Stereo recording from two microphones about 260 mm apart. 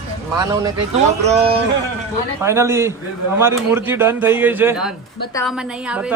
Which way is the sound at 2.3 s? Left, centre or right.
Centre.